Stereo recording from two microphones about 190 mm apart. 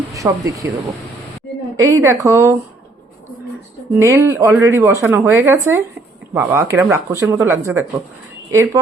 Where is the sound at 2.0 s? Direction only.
15° right (ahead or behind).